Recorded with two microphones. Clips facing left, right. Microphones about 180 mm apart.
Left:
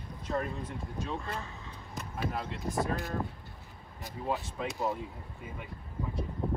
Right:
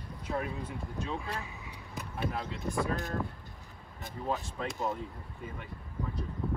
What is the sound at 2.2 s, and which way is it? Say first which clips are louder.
Speech: even; 5° left (ahead or behind).